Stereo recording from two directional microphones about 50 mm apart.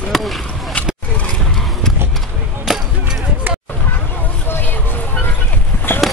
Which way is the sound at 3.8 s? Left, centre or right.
Left.